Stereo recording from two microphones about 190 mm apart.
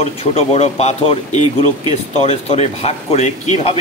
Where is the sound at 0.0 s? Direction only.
35° left (ahead or behind).